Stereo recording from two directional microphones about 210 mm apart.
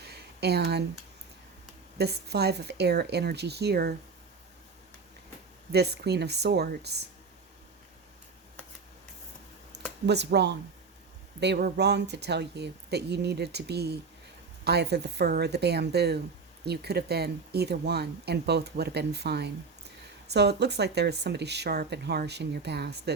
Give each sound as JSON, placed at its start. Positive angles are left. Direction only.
{"t": 0.0, "sound": "a sound", "side_deg": -50}
{"t": 2.0, "sound": "speech", "side_deg": -50}
{"t": 5.7, "sound": "speech", "side_deg": -50}
{"t": 10.1, "sound": "speech", "side_deg": -55}